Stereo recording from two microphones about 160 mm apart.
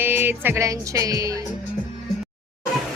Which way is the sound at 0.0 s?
10° right (ahead or behind).